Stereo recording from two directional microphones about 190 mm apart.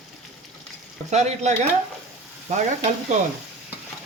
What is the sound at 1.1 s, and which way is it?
Speech, 35° right (ahead or behind).